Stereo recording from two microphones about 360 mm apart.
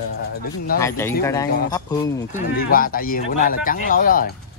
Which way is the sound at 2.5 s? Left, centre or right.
Left.